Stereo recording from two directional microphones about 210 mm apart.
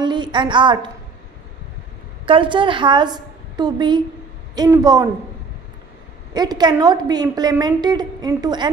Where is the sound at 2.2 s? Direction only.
25° right (ahead or behind).